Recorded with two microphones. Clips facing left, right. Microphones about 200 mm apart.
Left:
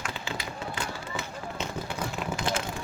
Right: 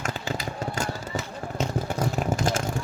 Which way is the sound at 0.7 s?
45° right (ahead or behind).